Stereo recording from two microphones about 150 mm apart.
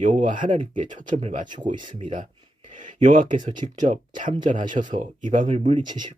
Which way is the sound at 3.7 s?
60° right (ahead or behind).